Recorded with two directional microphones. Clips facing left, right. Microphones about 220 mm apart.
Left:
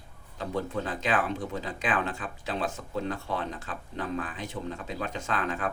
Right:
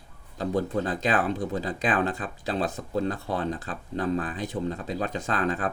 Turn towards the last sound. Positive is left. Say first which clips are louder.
# right 4 dB
turn(degrees=-35)  # may be behind; listen again after turning